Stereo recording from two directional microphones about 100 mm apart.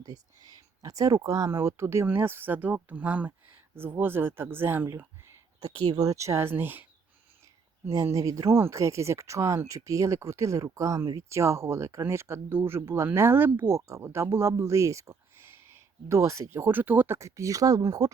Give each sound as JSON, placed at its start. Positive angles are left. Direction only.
{"t": 0.8, "sound": "speech", "side_deg": -35}
{"t": 5.7, "sound": "speech", "side_deg": -45}
{"t": 7.9, "sound": "speech", "side_deg": -30}
{"t": 17.2, "sound": "speech", "side_deg": -30}